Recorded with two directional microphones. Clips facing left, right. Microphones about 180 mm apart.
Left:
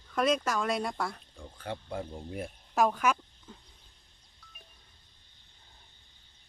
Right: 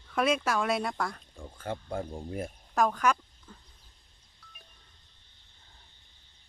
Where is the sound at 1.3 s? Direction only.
45° right (ahead or behind).